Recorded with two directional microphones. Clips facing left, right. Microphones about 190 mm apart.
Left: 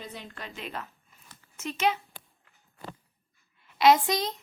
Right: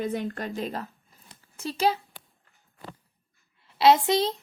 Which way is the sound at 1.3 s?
35° right (ahead or behind).